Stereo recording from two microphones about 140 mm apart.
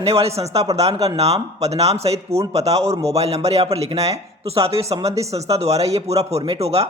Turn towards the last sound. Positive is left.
turn(degrees=-45)  # may be behind; listen again after turning